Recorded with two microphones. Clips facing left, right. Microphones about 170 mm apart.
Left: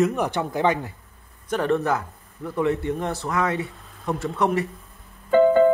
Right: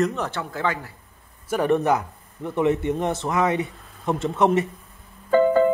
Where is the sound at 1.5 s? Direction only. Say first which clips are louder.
Right 2 dB; 15° right (ahead or behind).